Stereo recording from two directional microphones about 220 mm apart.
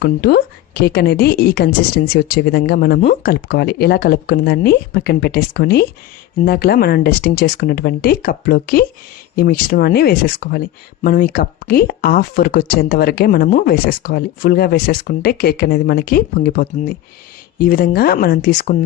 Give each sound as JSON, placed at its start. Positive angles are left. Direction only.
{"t": 0.0, "sound": "speech", "side_deg": 45}